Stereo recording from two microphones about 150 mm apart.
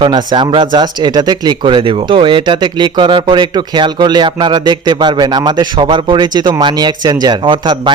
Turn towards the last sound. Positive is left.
turn(degrees=-30)  # may be behind; listen again after turning